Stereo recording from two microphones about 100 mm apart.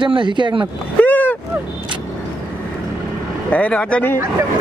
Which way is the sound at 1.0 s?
20° left (ahead or behind).